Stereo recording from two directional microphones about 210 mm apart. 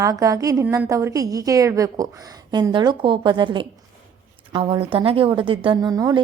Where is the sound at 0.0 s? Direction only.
15° right (ahead or behind).